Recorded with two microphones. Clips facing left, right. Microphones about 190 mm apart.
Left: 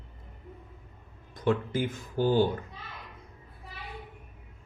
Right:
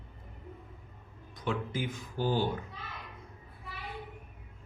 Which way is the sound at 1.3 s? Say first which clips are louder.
Left 7 dB; 50° left (ahead or behind).